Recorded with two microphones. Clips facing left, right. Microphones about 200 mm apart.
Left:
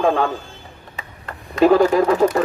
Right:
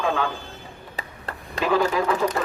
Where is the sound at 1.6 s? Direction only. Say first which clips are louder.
Left 8 dB; 45° left (ahead or behind).